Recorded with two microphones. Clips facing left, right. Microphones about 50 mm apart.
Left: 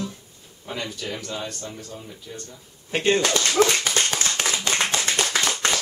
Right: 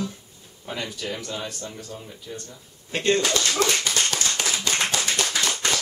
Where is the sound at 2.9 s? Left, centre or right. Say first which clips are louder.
Left 1 dB; centre.